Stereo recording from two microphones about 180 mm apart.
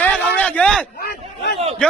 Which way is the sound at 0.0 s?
10° left (ahead or behind).